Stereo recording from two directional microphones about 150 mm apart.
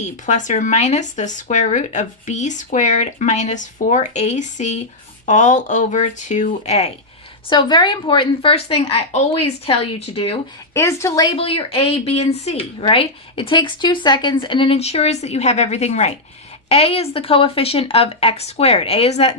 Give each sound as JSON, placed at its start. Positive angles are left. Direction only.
{"t": 0.0, "sound": "speech", "side_deg": 55}
{"t": 7.5, "sound": "speech", "side_deg": 30}
{"t": 10.8, "sound": "a woman's voice", "side_deg": 20}
{"t": 11.3, "sound": "speech", "side_deg": 40}
{"t": 12.8, "sound": "speech", "side_deg": 35}